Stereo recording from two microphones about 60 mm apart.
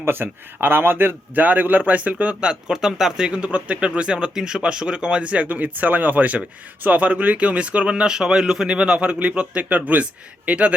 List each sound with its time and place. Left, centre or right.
0.0 s a man's voice: right